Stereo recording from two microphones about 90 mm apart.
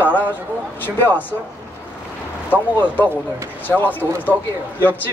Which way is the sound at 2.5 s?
20° left (ahead or behind).